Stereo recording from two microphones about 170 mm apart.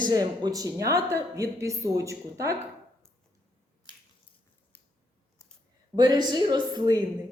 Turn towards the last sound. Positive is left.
turn(degrees=-25)  # may be behind; listen again after turning